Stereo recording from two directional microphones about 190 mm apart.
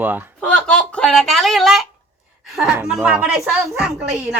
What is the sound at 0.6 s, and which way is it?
A woman's voice, 5° left (ahead or behind).